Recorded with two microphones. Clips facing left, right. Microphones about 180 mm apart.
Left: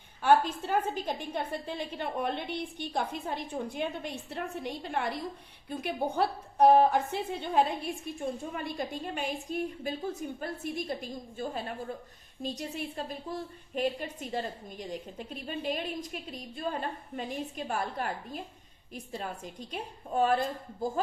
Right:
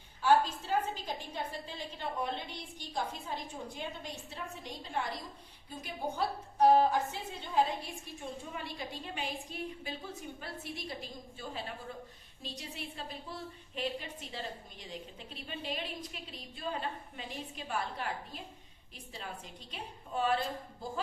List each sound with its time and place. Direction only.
0.2 s a woman's voice: 60° left (ahead or behind)
8.5 s a woman's voice: 50° left (ahead or behind)